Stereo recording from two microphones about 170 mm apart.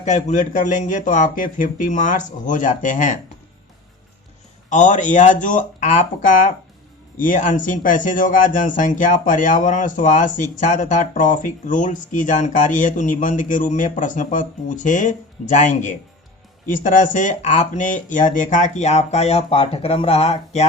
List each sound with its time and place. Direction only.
0.0 s speech: 45° left (ahead or behind)
4.7 s speech: 45° left (ahead or behind)